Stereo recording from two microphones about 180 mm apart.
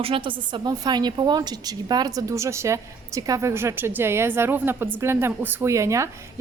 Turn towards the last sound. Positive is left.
turn(degrees=-15)  # may be behind; listen again after turning